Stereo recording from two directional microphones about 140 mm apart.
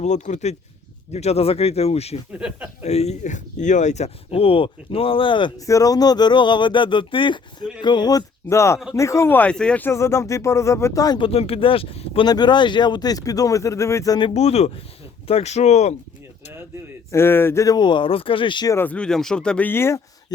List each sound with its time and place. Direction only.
0.0 s speech: 55° left (ahead or behind)
2.3 s speech: 10° right (ahead or behind)
2.8 s speech: 50° left (ahead or behind); by 11.2 s 25° left (ahead or behind)
11.2 s speech: 45° left (ahead or behind); by 14.3 s 30° left (ahead or behind)
14.3 s speech: 50° left (ahead or behind)
17.1 s speech: 15° left (ahead or behind); by 18.7 s 35° left (ahead or behind)
18.7 s speech: 15° left (ahead or behind)